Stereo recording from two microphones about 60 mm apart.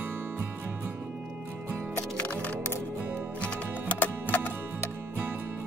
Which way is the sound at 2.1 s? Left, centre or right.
Left.